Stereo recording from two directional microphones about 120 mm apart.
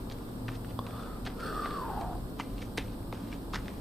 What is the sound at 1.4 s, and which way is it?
Music, centre (ahead or behind).